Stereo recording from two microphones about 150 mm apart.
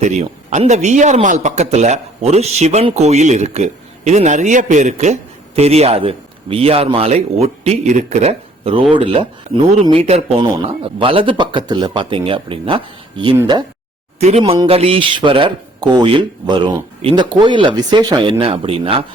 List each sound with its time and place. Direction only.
0.0 s speech: 50° right (ahead or behind); by 13.3 s 35° right (ahead or behind)
14.2 s speech: 45° right (ahead or behind)